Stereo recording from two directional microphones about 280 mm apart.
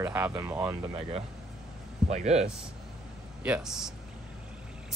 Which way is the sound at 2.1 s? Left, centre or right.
Right.